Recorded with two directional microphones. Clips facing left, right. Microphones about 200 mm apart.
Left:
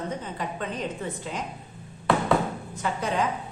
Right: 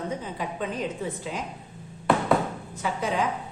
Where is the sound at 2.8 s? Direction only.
5° right (ahead or behind).